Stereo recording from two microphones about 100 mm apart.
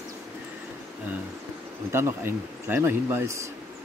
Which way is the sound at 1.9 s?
25° right (ahead or behind).